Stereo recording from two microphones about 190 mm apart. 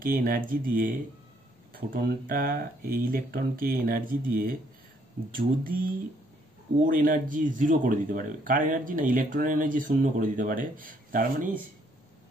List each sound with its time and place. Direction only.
0.0 s speech: 50° right (ahead or behind)
6.8 s speech: 45° right (ahead or behind)